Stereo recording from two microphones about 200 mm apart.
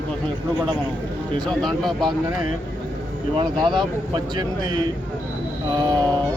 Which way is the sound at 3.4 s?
25° right (ahead or behind).